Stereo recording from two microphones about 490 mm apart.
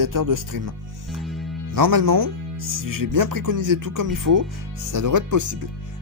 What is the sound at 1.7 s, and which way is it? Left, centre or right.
Speech, right.